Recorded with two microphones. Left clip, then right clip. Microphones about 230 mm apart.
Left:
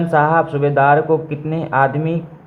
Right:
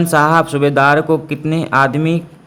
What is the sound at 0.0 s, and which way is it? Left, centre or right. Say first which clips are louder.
A man's voice: right 2 dB; right.